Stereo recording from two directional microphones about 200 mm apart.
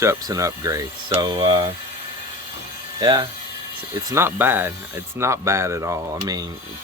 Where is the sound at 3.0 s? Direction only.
20° right (ahead or behind).